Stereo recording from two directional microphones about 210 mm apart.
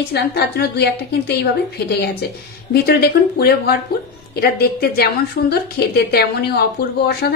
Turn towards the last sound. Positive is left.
turn(degrees=50)  # may be behind; listen again after turning